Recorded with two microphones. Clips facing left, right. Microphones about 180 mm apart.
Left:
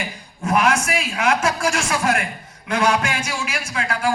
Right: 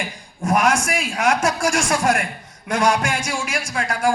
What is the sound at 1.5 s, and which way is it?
A man's voice, 50° right (ahead or behind).